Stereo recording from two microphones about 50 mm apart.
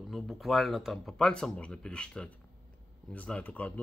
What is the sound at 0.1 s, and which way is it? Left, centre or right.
Speech, centre.